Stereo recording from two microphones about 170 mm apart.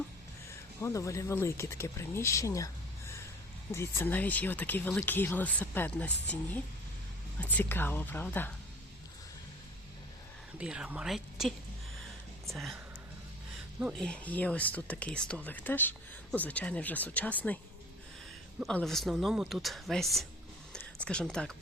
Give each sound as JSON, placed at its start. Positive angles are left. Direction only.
{"t": 0.8, "sound": "speech", "side_deg": 20}
{"t": 3.7, "sound": "speech", "side_deg": 15}
{"t": 10.6, "sound": "speech", "side_deg": -5}
{"t": 13.9, "sound": "speech", "side_deg": 5}
{"t": 18.6, "sound": "speech", "side_deg": 5}
{"t": 20.7, "sound": "a sound", "side_deg": 5}